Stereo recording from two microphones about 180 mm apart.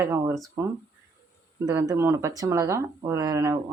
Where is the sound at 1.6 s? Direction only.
20° right (ahead or behind).